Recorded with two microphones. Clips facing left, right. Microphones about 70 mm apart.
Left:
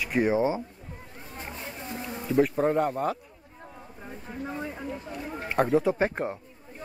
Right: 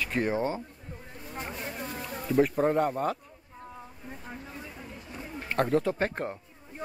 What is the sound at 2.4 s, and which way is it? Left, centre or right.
Speech, centre.